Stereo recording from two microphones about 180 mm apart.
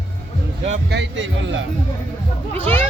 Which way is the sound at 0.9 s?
85° right.